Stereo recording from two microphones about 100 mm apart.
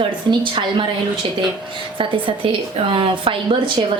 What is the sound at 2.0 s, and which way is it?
A woman's voice, 60° right (ahead or behind).